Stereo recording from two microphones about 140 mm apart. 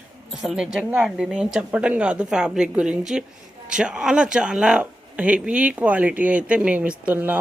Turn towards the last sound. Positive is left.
turn(degrees=-10)  # may be behind; listen again after turning